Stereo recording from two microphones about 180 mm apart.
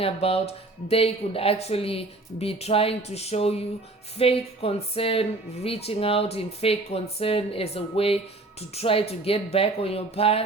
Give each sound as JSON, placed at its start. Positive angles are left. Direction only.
{"t": 0.0, "sound": "speech", "side_deg": 35}